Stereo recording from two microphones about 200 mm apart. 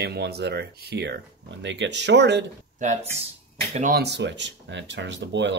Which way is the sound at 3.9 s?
55° right (ahead or behind).